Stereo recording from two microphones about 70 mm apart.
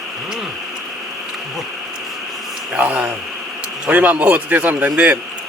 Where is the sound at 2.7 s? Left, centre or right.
Centre.